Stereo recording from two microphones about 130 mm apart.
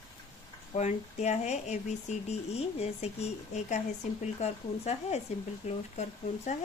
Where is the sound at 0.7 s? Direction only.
60° left (ahead or behind).